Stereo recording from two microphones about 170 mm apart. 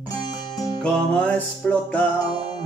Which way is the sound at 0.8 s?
5° left (ahead or behind).